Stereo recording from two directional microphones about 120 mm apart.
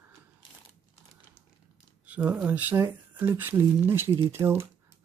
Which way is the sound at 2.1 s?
10° right (ahead or behind).